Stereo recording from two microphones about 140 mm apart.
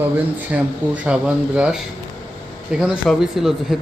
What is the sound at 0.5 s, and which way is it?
A man's voice, 10° right (ahead or behind).